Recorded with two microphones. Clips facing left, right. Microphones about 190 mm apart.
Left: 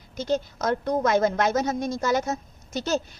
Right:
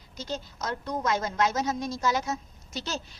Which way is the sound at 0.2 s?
55° left (ahead or behind).